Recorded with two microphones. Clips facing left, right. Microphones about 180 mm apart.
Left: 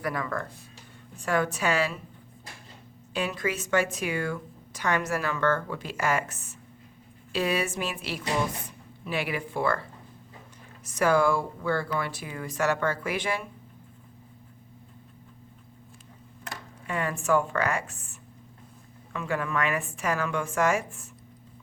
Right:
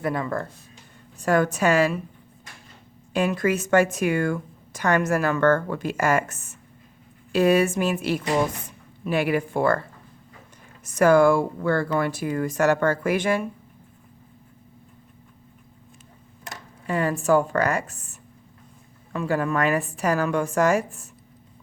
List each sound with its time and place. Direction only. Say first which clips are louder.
0.0 s speech: right 5 dB; 25° right (ahead or behind)
1.2 s speech: right 6 dB; 45° right (ahead or behind)
3.1 s speech: right 7 dB; 50° right (ahead or behind)
10.8 s speech: right 7 dB; 50° right (ahead or behind)
16.8 s a woman's voice: right 6 dB; 35° right (ahead or behind)